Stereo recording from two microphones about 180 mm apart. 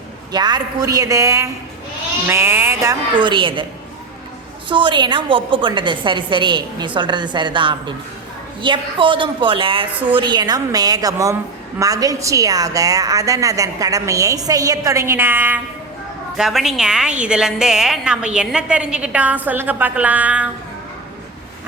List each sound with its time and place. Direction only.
0.3 s a woman's voice: 25° right (ahead or behind)
3.2 s a woman's voice: 25° right (ahead or behind)
4.7 s a woman's voice: 25° right (ahead or behind); by 20.5 s 10° right (ahead or behind)